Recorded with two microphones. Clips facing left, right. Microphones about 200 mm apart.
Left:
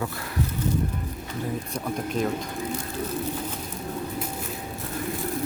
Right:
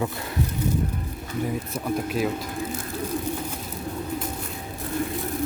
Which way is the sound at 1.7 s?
5° right (ahead or behind).